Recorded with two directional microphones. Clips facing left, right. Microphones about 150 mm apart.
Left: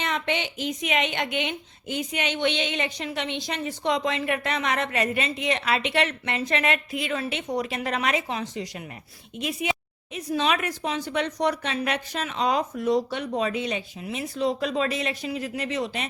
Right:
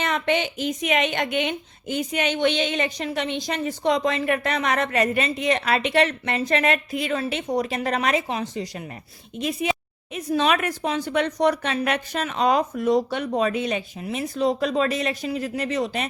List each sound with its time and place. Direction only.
0.0 s a woman's voice: 45° right (ahead or behind)
10.2 s a woman's voice: 55° right (ahead or behind)